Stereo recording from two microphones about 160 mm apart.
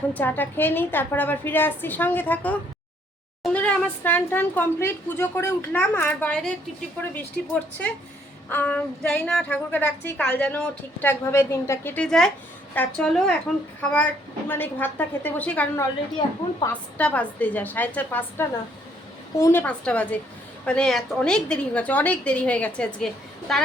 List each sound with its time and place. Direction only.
0.1 s a woman's voice: 10° left (ahead or behind)
16.6 s a woman's voice: 30° left (ahead or behind)
17.0 s a woman's voice: 10° left (ahead or behind)